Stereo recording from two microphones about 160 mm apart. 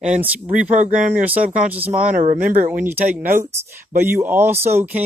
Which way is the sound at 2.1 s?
55° right (ahead or behind).